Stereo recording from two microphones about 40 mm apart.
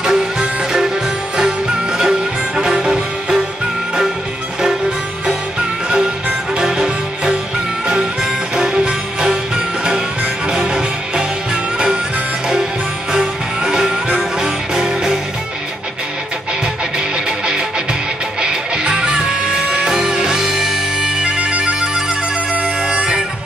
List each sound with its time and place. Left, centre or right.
0.0 s music: centre
6.5 s music: centre
10.5 s music: centre
13.1 s music: centre
18.4 s music: right
21.3 s bagpipes: right
22.5 s music: right